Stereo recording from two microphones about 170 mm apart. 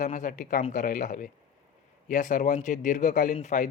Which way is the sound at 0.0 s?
50° left (ahead or behind).